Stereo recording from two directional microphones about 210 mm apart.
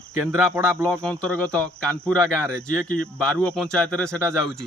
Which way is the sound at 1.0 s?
5° left (ahead or behind).